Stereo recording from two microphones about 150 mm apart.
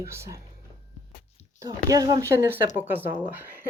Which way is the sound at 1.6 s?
25° right (ahead or behind).